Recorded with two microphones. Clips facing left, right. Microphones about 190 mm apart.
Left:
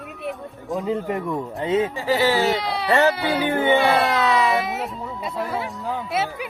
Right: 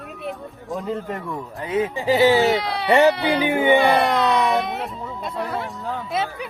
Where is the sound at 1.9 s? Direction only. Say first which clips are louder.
Right 4 dB; 20° right (ahead or behind).